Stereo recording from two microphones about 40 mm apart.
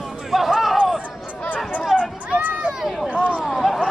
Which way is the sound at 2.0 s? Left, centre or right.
Right.